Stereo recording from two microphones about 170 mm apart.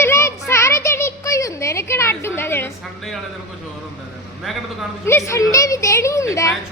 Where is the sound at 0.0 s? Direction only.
15° left (ahead or behind).